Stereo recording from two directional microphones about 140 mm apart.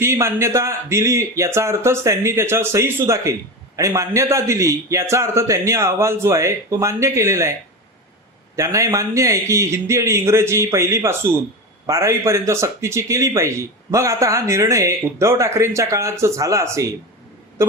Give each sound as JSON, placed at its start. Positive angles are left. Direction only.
{"t": 0.0, "sound": "speech", "side_deg": -20}
{"t": 8.5, "sound": "speech", "side_deg": -20}
{"t": 17.6, "sound": "a sound", "side_deg": -20}